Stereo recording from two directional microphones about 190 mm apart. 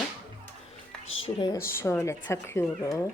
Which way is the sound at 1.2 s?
25° left (ahead or behind).